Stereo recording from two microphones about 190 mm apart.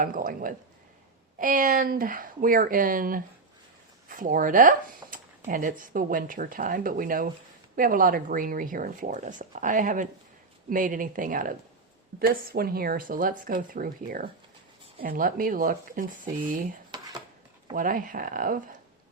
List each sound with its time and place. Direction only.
0.0 s speech: 45° right (ahead or behind)
17.7 s speech: 45° right (ahead or behind)